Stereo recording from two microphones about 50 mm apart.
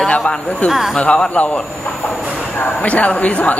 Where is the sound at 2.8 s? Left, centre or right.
Left.